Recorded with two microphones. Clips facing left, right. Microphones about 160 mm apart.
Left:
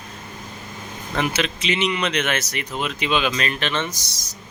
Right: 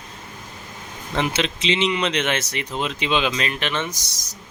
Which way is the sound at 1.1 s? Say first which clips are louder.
Even; 25° right (ahead or behind).